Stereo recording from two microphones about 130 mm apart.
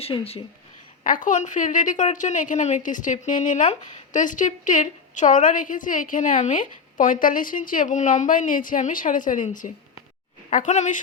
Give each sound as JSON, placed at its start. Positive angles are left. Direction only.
{"t": 0.0, "sound": "speech", "side_deg": 50}
{"t": 1.0, "sound": "a woman's voice", "side_deg": 90}
{"t": 7.0, "sound": "a woman's voice", "side_deg": 90}
{"t": 10.5, "sound": "a woman's voice", "side_deg": 70}